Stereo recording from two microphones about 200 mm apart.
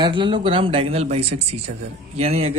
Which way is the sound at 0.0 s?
25° right (ahead or behind).